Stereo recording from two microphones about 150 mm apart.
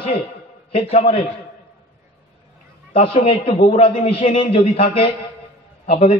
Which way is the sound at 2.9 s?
40° left (ahead or behind).